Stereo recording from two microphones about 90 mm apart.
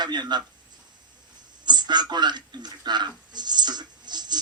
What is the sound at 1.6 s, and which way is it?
Speech, 55° right (ahead or behind).